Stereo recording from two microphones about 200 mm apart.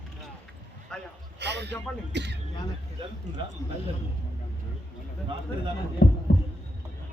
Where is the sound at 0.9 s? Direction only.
5° left (ahead or behind).